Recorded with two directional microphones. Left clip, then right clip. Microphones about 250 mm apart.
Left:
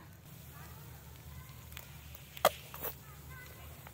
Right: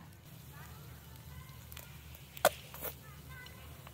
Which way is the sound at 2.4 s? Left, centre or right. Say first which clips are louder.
Even; centre.